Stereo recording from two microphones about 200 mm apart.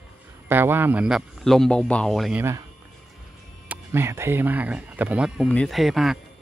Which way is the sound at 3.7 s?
10° right (ahead or behind).